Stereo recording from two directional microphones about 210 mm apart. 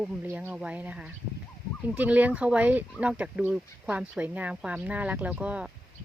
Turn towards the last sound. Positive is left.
turn(degrees=-5)  # may be behind; listen again after turning